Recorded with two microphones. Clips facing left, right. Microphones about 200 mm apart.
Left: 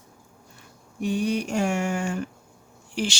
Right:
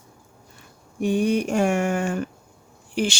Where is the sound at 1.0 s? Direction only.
55° right (ahead or behind).